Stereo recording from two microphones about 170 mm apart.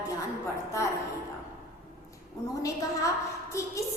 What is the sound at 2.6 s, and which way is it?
A woman's voice, 20° left (ahead or behind).